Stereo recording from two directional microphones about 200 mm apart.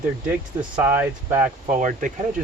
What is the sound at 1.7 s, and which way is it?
Speech, 40° right (ahead or behind).